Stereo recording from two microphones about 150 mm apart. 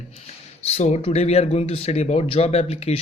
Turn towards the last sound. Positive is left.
turn(degrees=45)  # may be behind; listen again after turning